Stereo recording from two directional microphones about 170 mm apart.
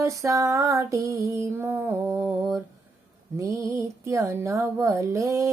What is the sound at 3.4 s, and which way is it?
Speech, 15° right (ahead or behind).